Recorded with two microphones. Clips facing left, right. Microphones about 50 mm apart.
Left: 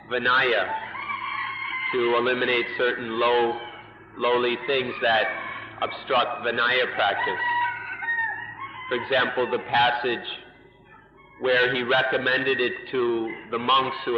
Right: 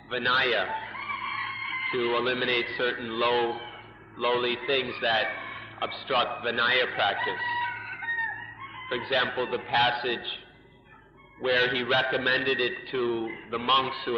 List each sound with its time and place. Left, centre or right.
0.1 s a man's voice: centre
0.7 s a sound: centre
3.3 s a man's voice: centre
6.0 s crowing: centre
9.0 s a man's voice: centre
9.6 s a man's voice: centre
9.9 s a man's voice: centre
11.4 s a man's voice: centre